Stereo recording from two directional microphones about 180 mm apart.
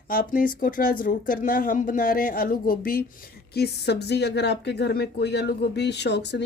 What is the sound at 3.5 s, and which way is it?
Speech, 65° left (ahead or behind).